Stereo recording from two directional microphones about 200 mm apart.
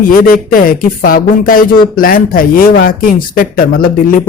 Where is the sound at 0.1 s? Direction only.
45° left (ahead or behind).